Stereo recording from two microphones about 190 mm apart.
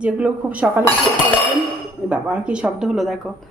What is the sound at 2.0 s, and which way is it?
Speech, 5° right (ahead or behind).